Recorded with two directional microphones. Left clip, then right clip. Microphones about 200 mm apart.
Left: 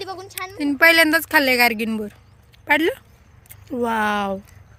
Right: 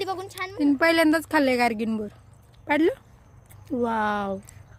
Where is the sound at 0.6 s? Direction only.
5° right (ahead or behind).